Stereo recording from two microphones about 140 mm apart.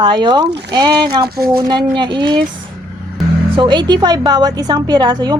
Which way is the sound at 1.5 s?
30° right (ahead or behind).